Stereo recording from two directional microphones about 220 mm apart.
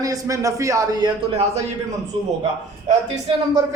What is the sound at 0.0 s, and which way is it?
A man's voice, 15° right (ahead or behind).